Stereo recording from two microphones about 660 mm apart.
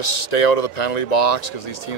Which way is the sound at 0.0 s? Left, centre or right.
Left.